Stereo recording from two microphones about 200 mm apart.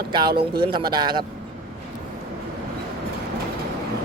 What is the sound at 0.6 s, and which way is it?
Speech, 25° right (ahead or behind).